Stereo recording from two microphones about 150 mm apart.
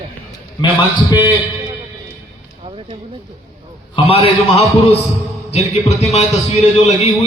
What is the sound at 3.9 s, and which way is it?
Speech, 40° left (ahead or behind).